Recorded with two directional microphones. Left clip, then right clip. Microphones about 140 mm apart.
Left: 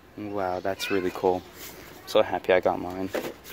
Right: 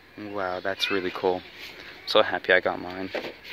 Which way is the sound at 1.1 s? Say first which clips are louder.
Left 1 dB; 10° right (ahead or behind).